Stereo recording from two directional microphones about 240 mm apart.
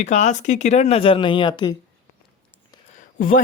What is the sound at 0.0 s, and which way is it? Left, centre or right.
Speech, left.